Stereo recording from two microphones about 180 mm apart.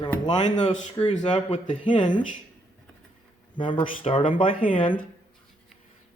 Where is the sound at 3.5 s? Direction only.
25° left (ahead or behind).